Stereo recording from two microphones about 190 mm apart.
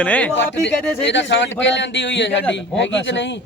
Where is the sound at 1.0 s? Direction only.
70° left (ahead or behind).